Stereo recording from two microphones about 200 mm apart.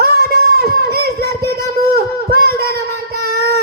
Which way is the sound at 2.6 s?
50° right (ahead or behind).